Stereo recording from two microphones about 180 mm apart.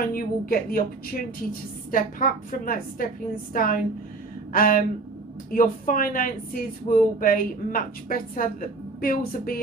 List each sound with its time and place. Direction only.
0.1 s speech: 55° left (ahead or behind)
1.9 s speech: 50° left (ahead or behind)